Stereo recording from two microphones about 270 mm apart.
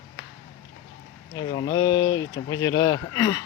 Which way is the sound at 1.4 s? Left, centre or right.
Centre.